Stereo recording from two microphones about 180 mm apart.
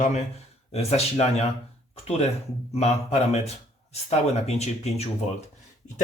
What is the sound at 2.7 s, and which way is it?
Speech, 35° left (ahead or behind).